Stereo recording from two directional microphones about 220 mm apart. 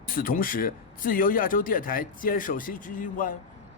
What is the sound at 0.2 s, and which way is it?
Speech, 40° left (ahead or behind).